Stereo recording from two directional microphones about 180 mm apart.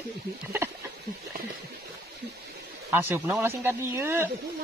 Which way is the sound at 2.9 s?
15° right (ahead or behind).